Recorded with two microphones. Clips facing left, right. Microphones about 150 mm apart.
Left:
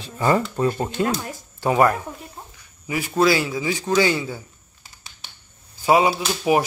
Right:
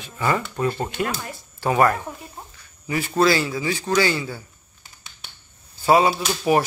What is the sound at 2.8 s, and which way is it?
A man's voice, 10° left (ahead or behind).